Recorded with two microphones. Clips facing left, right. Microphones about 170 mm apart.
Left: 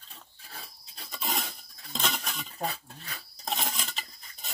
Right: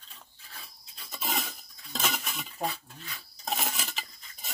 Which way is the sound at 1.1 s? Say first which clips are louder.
Even; centre (ahead or behind).